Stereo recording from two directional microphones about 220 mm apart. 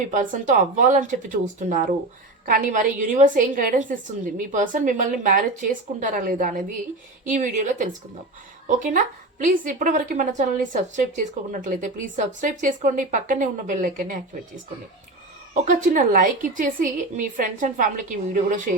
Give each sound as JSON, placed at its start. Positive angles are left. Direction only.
{"t": 0.1, "sound": "a woman's voice", "side_deg": -35}
{"t": 15.6, "sound": "a woman's voice", "side_deg": -35}